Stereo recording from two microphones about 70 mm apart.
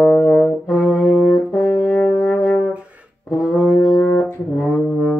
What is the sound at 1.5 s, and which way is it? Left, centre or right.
Music, centre.